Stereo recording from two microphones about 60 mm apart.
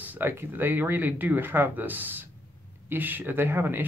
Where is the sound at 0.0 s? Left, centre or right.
Right.